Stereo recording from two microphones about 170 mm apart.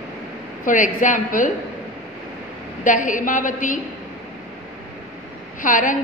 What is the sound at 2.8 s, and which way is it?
Speech, 50° left (ahead or behind).